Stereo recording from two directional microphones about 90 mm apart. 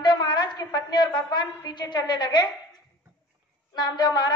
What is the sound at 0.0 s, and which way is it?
A woman's voice, 50° left (ahead or behind).